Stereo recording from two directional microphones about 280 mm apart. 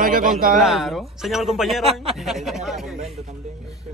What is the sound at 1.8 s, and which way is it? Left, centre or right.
Speech, right.